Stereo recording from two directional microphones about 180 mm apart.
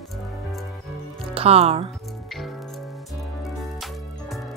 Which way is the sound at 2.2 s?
Centre (ahead or behind).